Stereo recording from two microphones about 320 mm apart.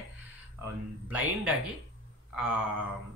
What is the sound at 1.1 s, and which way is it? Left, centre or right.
Speech, centre.